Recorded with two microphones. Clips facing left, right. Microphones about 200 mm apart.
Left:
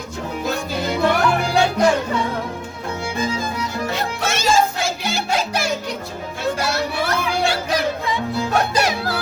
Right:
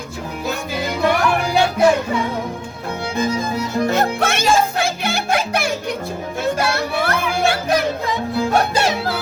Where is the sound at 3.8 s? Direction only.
50° right (ahead or behind).